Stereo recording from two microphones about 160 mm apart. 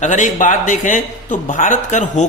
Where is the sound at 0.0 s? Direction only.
50° left (ahead or behind).